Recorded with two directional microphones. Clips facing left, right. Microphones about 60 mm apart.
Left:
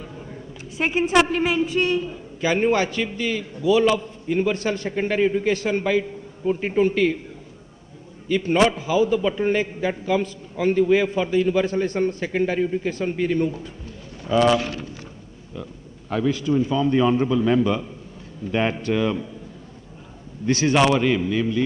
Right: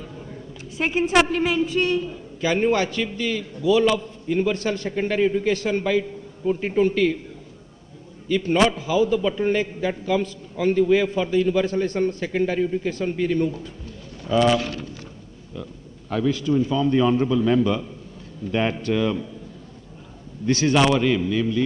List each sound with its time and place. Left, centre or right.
0.0 s a woman's voice: left
8.3 s a man's voice: left
20.4 s a man's voice: left